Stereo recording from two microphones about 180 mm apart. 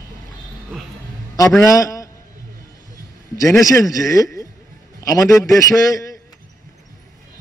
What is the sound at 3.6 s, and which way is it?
A man's voice, 20° left (ahead or behind).